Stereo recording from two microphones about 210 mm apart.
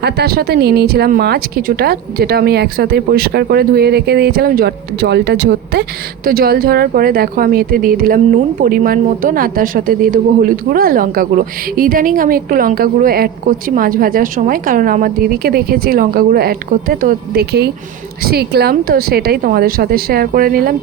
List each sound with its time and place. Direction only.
0.0 s speech: 50° right (ahead or behind)